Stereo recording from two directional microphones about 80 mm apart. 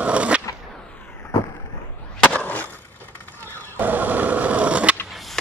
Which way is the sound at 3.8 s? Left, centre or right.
Right.